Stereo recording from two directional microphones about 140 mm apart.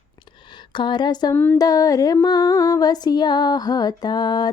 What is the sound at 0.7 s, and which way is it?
Speech, 30° left (ahead or behind).